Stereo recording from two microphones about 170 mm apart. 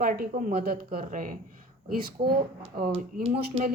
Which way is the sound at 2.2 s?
25° right (ahead or behind).